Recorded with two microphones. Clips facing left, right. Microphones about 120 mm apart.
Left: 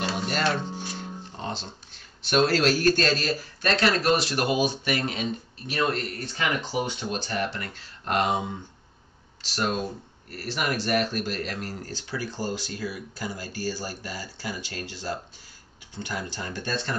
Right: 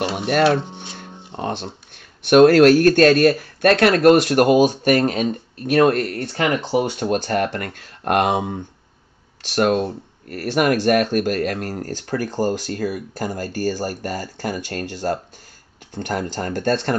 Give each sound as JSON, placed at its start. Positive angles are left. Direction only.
{"t": 0.1, "sound": "speech", "side_deg": -60}
{"t": 0.9, "sound": "music", "side_deg": -60}
{"t": 2.2, "sound": "speech", "side_deg": -55}
{"t": 6.9, "sound": "speech", "side_deg": -55}